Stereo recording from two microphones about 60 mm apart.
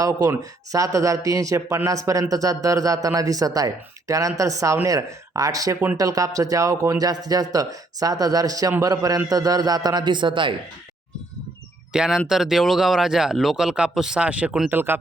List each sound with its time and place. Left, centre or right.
0.0 s speech: right
4.9 s speech: right
11.9 s speech: centre
14.2 s speech: right
14.7 s speech: right